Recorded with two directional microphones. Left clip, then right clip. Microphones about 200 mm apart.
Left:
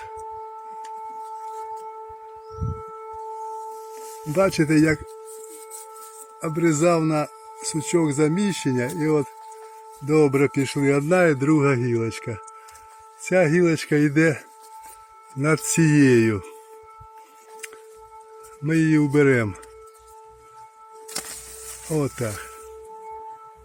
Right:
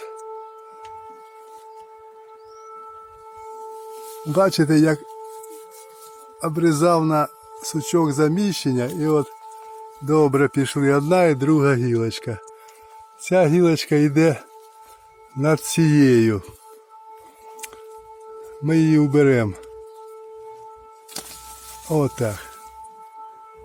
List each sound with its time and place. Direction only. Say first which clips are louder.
4.4 s speech: right 2 dB; 15° right (ahead or behind)
6.4 s speech: right 2 dB; 15° right (ahead or behind)
18.6 s speech: right 2 dB; 15° right (ahead or behind)
21.8 s speech: right 4 dB; 20° right (ahead or behind)